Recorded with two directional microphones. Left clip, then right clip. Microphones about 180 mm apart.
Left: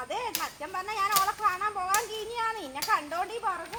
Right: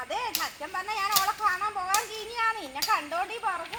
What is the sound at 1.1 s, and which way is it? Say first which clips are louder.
A child's voice: right 1 dB; 15° left (ahead or behind).